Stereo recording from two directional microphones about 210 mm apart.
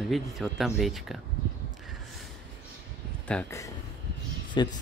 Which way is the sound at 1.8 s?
Centre (ahead or behind).